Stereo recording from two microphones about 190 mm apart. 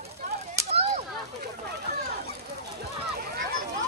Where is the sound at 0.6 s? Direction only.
35° right (ahead or behind).